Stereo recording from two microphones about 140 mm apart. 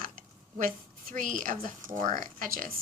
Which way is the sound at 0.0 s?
80° right.